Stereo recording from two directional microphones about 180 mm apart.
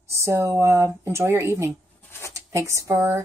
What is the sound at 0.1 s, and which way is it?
Speech, 15° right (ahead or behind).